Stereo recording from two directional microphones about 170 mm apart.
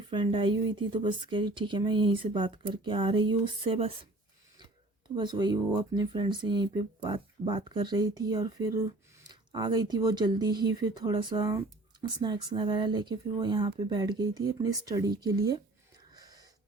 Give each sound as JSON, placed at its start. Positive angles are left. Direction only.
{"t": 0.1, "sound": "speech", "side_deg": -30}
{"t": 5.1, "sound": "speech", "side_deg": -25}
{"t": 16.1, "sound": "gasp", "side_deg": -20}